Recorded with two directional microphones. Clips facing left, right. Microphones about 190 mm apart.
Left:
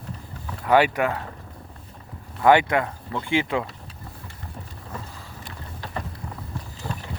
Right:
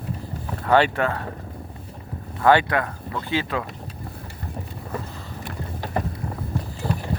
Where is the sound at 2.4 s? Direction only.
15° left (ahead or behind).